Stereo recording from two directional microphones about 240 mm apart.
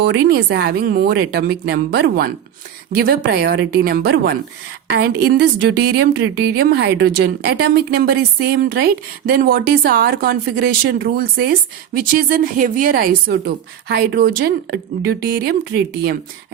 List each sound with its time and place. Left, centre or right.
0.0 s a woman's voice: right